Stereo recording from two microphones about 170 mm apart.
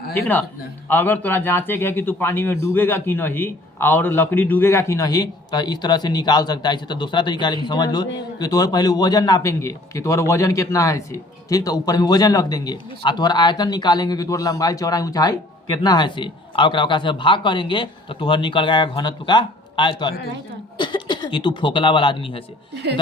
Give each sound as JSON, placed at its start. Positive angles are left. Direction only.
{"t": 0.1, "sound": "a man's voice", "side_deg": 10}
{"t": 22.7, "sound": "a woman's voice", "side_deg": -75}